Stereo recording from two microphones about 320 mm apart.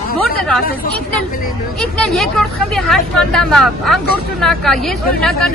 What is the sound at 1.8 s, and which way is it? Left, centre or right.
Speech, centre.